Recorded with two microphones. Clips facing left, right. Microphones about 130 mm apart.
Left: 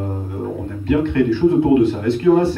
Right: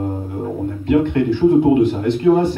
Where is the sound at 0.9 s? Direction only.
15° right (ahead or behind).